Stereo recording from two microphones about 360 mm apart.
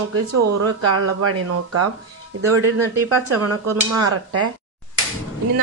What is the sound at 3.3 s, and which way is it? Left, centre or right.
Speech, right.